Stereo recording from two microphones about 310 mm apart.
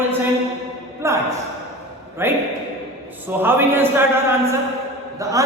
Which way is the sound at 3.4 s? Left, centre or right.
Centre.